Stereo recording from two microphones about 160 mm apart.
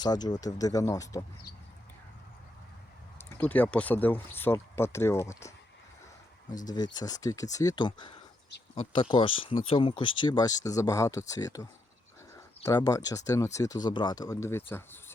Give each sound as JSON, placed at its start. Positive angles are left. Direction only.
{"t": 0.0, "sound": "speech", "side_deg": 25}
{"t": 3.2, "sound": "speech", "side_deg": 10}
{"t": 6.7, "sound": "speech", "side_deg": 25}
{"t": 12.6, "sound": "speech", "side_deg": 20}